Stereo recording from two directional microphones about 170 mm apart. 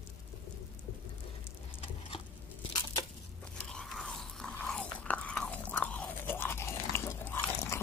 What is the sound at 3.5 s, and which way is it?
Biting, 5° left (ahead or behind).